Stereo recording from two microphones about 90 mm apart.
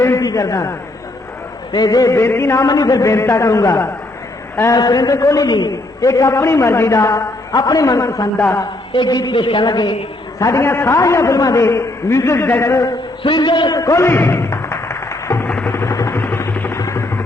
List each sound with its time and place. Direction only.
0.0 s a sound: 30° left (ahead or behind)
0.3 s a man's voice: 40° left (ahead or behind)
2.6 s a man's voice: 45° left (ahead or behind)
4.7 s a man's voice: 45° left (ahead or behind)
7.6 s a man's voice: 45° left (ahead or behind)
8.9 s a man's voice: 55° left (ahead or behind)
9.3 s speech: 70° left (ahead or behind)
10.4 s a man's voice: 30° left (ahead or behind)
13.2 s speech: 60° left (ahead or behind)
13.7 s a man's voice: 35° left (ahead or behind)
14.1 s music: 25° left (ahead or behind)
15.4 s music: 15° left (ahead or behind)
15.7 s vehicle: 30° left (ahead or behind)
16.7 s music: 30° left (ahead or behind)